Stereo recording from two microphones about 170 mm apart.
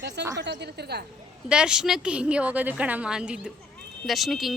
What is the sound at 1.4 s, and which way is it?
A woman's voice, 5° right (ahead or behind).